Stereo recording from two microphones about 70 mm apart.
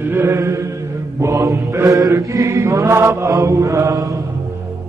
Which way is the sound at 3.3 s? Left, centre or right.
Right.